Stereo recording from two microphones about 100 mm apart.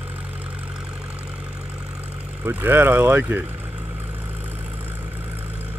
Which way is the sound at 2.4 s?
20° right (ahead or behind).